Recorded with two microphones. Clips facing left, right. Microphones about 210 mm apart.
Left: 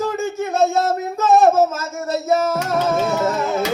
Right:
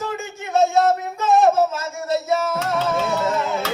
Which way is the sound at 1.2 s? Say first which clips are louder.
Left 4 dB; 45° left (ahead or behind).